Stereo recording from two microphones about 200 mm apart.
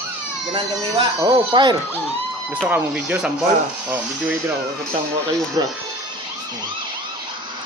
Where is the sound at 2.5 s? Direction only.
5° right (ahead or behind).